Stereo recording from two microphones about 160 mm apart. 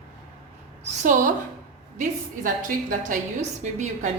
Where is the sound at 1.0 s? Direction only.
55° right (ahead or behind).